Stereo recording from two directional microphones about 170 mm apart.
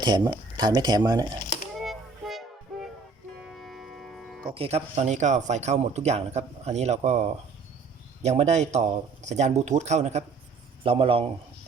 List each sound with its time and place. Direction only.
0.0 s speech: 25° right (ahead or behind)
1.7 s music: centre (ahead or behind)
4.5 s speech: 35° right (ahead or behind)